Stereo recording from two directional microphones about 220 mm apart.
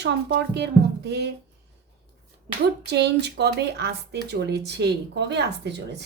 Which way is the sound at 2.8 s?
50° right (ahead or behind).